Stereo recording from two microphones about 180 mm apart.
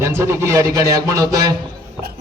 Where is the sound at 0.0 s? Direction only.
15° right (ahead or behind).